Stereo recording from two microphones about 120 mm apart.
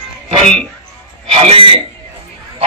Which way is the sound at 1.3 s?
55° right (ahead or behind).